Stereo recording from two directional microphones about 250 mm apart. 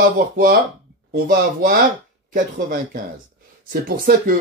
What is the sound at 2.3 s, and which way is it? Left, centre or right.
Speech, right.